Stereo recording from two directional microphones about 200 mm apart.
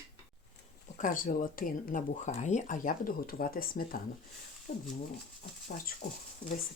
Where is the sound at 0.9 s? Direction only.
40° left (ahead or behind).